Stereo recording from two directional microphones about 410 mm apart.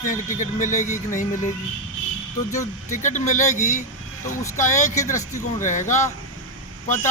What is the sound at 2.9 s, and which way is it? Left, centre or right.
Speech, centre.